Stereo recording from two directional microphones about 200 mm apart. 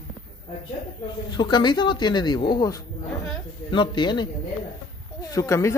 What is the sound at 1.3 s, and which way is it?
Speech, 20° left (ahead or behind).